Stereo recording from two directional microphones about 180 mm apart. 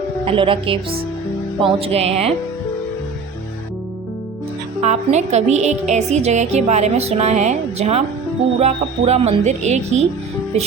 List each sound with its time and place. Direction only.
0.3 s a woman's voice: 30° right (ahead or behind)
4.8 s a woman's voice: 40° right (ahead or behind)